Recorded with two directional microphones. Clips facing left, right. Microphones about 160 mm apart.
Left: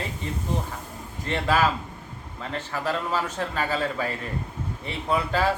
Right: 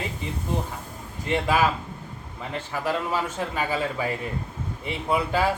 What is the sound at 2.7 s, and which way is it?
Speech, 15° right (ahead or behind).